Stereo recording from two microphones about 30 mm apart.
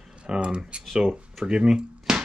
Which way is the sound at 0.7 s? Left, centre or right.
Right.